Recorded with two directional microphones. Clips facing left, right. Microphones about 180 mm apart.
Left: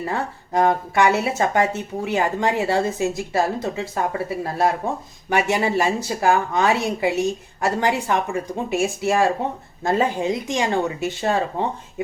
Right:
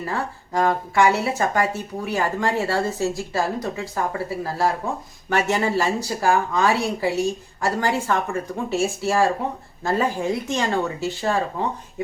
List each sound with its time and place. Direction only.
0.0 s speech: 25° left (ahead or behind)